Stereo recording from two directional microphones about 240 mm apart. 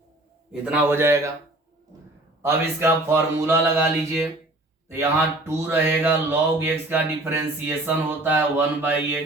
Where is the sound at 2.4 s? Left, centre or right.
Centre.